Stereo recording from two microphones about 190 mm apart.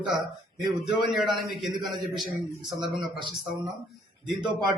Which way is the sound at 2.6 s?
25° right (ahead or behind).